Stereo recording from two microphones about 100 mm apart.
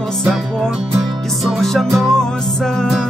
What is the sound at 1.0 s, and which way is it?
Music, centre (ahead or behind).